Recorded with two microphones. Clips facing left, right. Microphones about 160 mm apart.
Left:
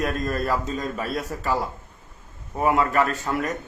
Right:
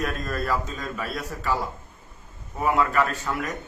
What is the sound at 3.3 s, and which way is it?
Mantra, 30° left (ahead or behind).